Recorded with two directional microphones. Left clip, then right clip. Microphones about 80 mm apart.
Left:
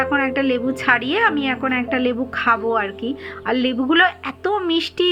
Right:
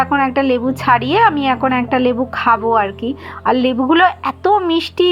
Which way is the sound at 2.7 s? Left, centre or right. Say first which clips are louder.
Right 6 dB; right.